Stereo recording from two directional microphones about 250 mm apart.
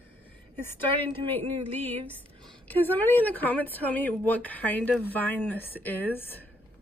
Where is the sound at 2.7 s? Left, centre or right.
Centre.